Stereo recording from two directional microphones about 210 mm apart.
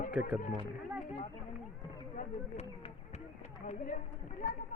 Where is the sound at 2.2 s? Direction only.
30° left (ahead or behind).